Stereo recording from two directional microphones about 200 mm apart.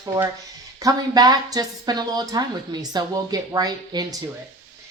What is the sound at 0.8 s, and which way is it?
A woman's voice, 20° right (ahead or behind).